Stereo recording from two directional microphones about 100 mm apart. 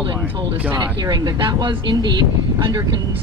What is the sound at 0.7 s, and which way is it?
Speech, 45° right (ahead or behind).